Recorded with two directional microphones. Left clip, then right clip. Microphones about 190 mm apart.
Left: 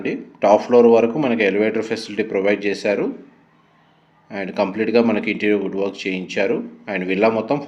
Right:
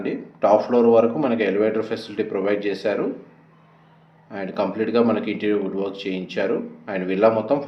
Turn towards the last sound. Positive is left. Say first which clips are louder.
# even
turn(degrees=40)  # may be behind; listen again after turning